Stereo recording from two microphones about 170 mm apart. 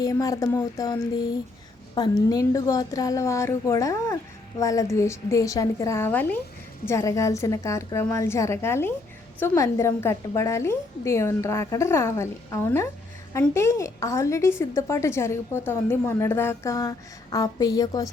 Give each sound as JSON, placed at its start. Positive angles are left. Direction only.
{"t": 0.0, "sound": "a woman's voice", "side_deg": 20}